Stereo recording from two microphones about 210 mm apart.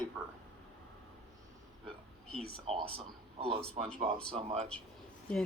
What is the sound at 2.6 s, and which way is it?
Speech, 25° right (ahead or behind).